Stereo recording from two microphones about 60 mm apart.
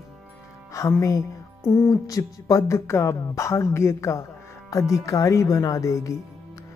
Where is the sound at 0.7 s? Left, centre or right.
Left.